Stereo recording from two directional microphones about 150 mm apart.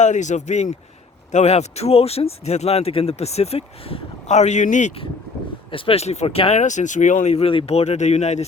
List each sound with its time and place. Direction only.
0.0 s speech: 55° left (ahead or behind)
5.7 s speech: 40° left (ahead or behind)